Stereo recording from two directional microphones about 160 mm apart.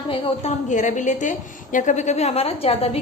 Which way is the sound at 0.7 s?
50° left (ahead or behind).